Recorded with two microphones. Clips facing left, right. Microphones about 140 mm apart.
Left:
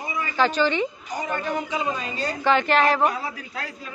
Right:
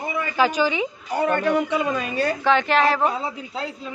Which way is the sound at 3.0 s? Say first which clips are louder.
Right 1 dB; 25° right (ahead or behind).